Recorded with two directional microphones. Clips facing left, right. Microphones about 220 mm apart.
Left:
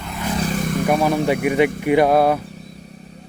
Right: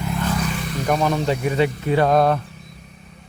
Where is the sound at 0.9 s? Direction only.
10° left (ahead or behind).